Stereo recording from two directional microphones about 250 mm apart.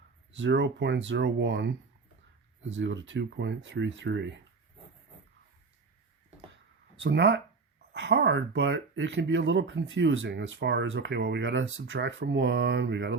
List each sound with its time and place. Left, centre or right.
0.3 s speech: right
2.7 s speech: right
7.0 s speech: right